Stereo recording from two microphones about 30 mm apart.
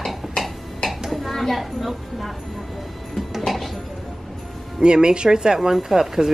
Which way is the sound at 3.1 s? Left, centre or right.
Centre.